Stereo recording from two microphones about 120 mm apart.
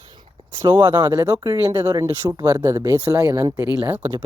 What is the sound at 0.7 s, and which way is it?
Speech, 35° right (ahead or behind).